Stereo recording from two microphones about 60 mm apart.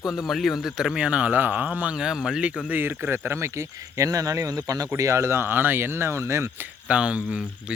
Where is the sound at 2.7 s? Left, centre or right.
Right.